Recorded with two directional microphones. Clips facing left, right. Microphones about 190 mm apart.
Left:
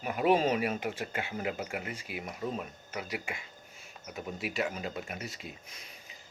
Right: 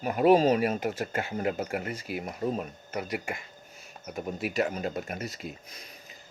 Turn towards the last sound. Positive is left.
turn(degrees=-40)  # may be behind; listen again after turning